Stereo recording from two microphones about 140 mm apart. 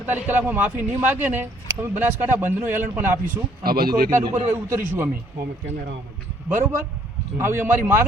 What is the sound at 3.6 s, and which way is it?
Speech, 90° right.